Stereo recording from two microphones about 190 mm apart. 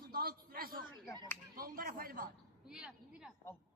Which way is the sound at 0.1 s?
50° right (ahead or behind).